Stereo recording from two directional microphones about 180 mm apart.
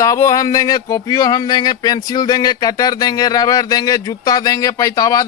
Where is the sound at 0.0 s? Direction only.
20° left (ahead or behind).